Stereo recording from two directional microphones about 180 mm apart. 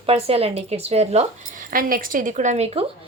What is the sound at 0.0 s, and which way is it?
A woman's voice, 35° right (ahead or behind).